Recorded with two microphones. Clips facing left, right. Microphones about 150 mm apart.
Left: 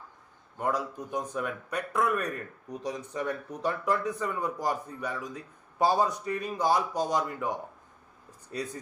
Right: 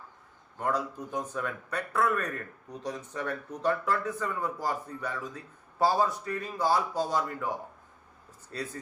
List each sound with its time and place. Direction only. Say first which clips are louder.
0.6 s speech: even; 10° left (ahead or behind)
8.5 s speech: left 2 dB; 15° left (ahead or behind)